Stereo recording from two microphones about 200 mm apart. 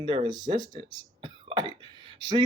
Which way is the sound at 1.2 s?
20° right (ahead or behind).